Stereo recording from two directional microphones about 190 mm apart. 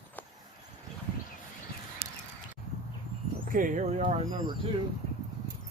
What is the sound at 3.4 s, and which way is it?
Speech, 45° right (ahead or behind).